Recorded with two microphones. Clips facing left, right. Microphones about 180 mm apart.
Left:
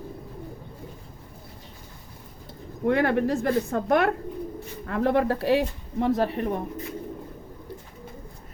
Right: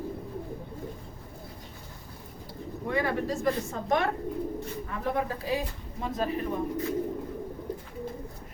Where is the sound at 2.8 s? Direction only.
65° left (ahead or behind).